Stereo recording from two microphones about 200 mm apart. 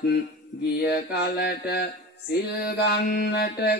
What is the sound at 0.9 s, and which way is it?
Mantra, 55° left (ahead or behind).